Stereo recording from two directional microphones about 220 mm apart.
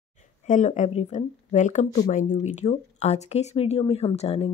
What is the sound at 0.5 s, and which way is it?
Speech, 35° left (ahead or behind).